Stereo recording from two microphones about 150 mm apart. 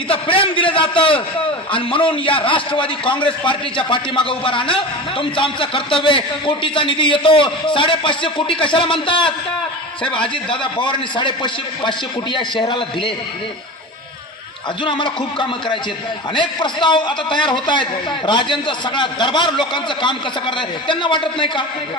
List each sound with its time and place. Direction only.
0.1 s a sound: 35° left (ahead or behind)
1.7 s a man's voice: 35° left (ahead or behind)
14.8 s a man's voice: 30° left (ahead or behind)